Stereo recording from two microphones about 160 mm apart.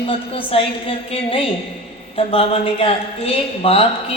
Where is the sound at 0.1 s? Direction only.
35° left (ahead or behind).